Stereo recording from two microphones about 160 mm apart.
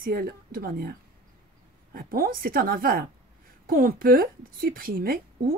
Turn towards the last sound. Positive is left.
turn(degrees=-65)  # may be behind; listen again after turning